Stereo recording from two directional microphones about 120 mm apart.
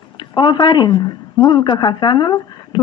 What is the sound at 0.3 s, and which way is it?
A woman's voice, 40° left (ahead or behind).